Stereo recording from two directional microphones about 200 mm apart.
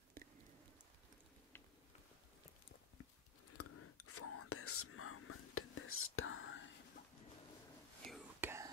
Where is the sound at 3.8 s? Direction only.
90° left; by 6.7 s 75° left (ahead or behind).